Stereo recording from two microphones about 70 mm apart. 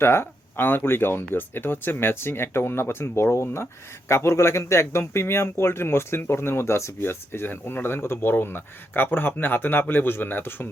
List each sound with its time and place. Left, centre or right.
0.0 s speech: left